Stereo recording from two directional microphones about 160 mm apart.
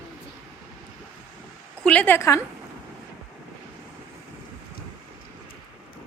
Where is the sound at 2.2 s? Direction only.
20° left (ahead or behind).